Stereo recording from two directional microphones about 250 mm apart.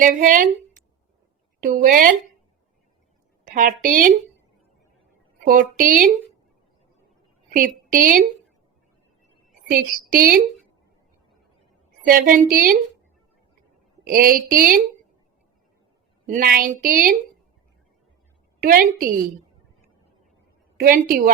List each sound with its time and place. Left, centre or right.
0.0 s a woman's voice: right
1.6 s a woman's voice: right
3.4 s a woman's voice: right
5.5 s a woman's voice: right
7.5 s a woman's voice: right
9.6 s a woman's voice: right
12.0 s a woman's voice: right
14.0 s a woman's voice: right
16.2 s a woman's voice: right
18.6 s a woman's voice: right
20.7 s a woman's voice: right